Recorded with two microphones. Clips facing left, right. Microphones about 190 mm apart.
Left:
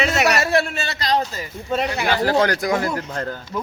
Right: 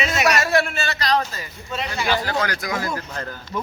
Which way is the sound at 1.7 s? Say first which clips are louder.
Left 3 dB; 55° left (ahead or behind).